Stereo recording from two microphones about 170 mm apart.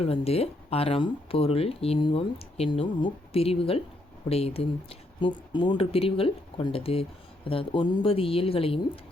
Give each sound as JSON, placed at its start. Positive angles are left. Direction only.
{"t": 0.0, "sound": "speech", "side_deg": 35}